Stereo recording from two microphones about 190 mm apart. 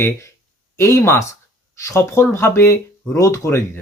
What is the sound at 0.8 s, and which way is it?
Speech, 15° left (ahead or behind).